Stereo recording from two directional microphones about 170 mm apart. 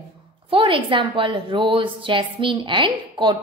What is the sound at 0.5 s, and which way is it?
A woman's voice, 30° right (ahead or behind).